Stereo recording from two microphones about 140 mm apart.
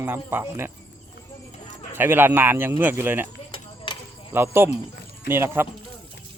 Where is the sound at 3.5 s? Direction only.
35° left (ahead or behind).